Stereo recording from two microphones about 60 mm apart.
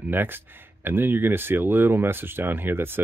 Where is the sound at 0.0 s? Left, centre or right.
Right.